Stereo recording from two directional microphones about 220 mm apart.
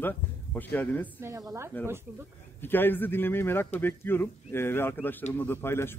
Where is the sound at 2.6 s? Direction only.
10° left (ahead or behind).